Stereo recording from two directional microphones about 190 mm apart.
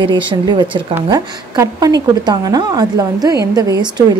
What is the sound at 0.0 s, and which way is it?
A woman's voice, 25° right (ahead or behind).